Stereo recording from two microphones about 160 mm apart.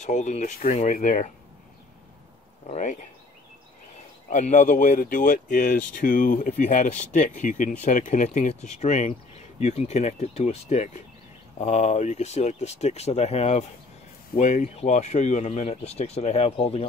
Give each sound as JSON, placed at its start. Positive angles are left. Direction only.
{"t": 0.0, "sound": "speech", "side_deg": 50}
{"t": 2.7, "sound": "speech", "side_deg": 50}
{"t": 4.3, "sound": "speech", "side_deg": 50}
{"t": 14.3, "sound": "speech", "side_deg": 55}